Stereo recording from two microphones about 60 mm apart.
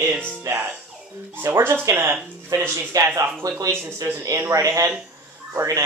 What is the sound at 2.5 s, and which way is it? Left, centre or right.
Speech, right.